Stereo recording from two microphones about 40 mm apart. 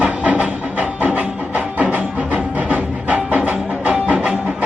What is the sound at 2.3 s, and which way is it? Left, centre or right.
Music, right.